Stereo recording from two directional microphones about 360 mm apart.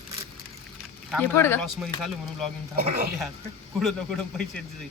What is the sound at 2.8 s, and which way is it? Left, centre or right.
Speech, right.